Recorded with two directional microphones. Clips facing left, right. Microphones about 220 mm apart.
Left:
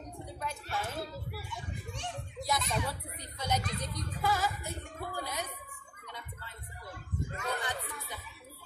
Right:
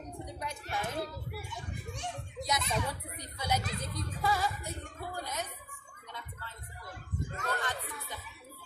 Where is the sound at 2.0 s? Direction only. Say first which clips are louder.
Even; 20° right (ahead or behind).